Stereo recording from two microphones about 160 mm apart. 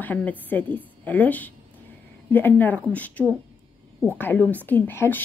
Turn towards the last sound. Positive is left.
turn(degrees=10)  # may be behind; listen again after turning